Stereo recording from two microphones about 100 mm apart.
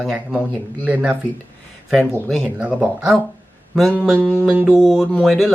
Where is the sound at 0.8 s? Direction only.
15° right (ahead or behind).